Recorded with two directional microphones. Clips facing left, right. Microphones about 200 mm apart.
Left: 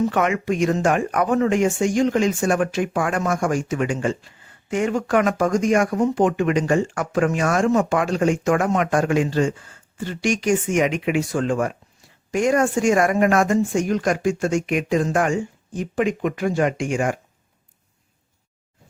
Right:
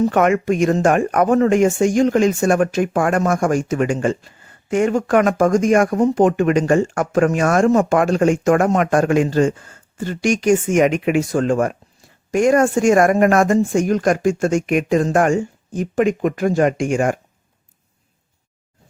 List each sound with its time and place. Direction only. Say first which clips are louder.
0.0 s speech: right 5 dB; 50° right (ahead or behind)